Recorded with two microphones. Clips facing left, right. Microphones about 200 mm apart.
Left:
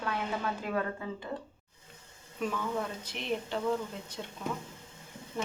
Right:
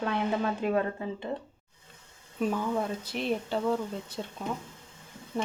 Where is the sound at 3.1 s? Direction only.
35° right (ahead or behind).